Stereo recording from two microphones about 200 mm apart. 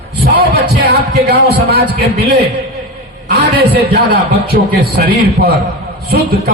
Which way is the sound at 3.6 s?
50° right (ahead or behind).